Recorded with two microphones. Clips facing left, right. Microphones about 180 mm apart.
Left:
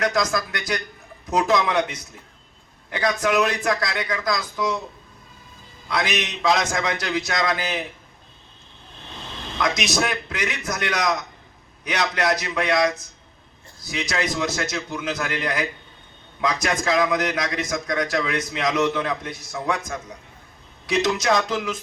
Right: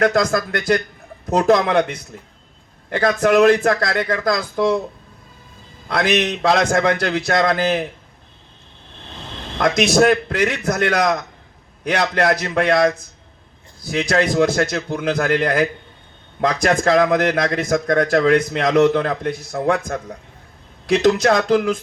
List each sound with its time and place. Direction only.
0.0 s a man's voice: 55° right (ahead or behind)
5.9 s a man's voice: 55° right (ahead or behind)
9.6 s a man's voice: 55° right (ahead or behind)